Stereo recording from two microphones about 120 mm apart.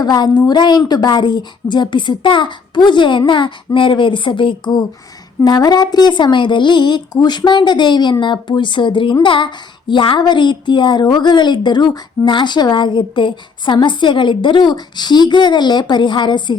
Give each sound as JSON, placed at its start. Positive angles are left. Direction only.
{"t": 0.0, "sound": "a woman's voice", "side_deg": 35}